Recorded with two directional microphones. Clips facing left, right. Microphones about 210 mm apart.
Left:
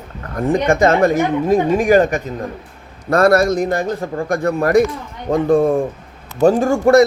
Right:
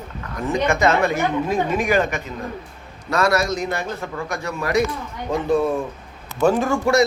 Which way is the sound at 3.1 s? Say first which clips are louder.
Left 7 dB; 55° left (ahead or behind).